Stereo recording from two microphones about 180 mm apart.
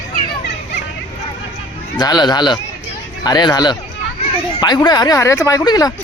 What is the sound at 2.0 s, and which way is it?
Speech, 25° left (ahead or behind).